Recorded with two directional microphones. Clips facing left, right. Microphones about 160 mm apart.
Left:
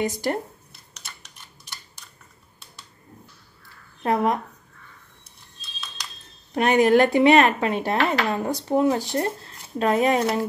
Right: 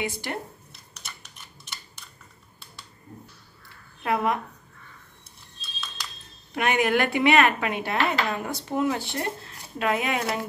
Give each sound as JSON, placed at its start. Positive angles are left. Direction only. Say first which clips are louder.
{"t": 0.0, "sound": "speech", "louder": "left 6 dB", "side_deg": 40}
{"t": 4.0, "sound": "speech", "louder": "left 3 dB", "side_deg": 35}
{"t": 6.5, "sound": "speech", "louder": "left 6 dB", "side_deg": 35}